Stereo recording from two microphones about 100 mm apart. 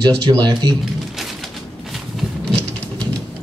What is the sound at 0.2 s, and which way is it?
Speech, 45° right (ahead or behind).